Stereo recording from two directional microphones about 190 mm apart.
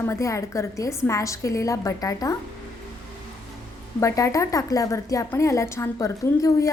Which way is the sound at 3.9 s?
15° left (ahead or behind).